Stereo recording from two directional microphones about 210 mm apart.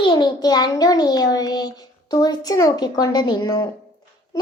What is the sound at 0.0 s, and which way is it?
A child's voice, 20° left (ahead or behind).